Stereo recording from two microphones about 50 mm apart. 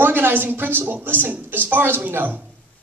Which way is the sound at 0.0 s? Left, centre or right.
Right.